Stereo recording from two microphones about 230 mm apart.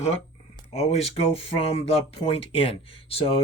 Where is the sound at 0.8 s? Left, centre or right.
Left.